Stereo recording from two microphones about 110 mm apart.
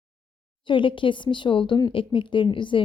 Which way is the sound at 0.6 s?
50° left (ahead or behind).